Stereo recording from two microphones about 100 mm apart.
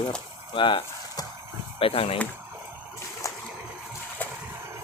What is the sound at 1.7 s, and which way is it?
Speech, 70° left (ahead or behind).